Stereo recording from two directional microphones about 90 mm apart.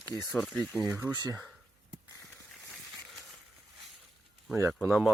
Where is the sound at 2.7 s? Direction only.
Centre (ahead or behind).